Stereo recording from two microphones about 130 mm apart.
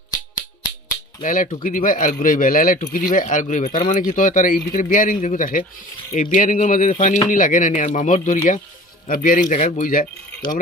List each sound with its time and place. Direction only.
1.2 s speech: 90° left; by 8.4 s 75° left (ahead or behind)
9.0 s speech: 90° left